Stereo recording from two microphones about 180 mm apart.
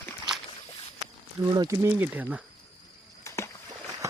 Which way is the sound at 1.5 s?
20° right (ahead or behind).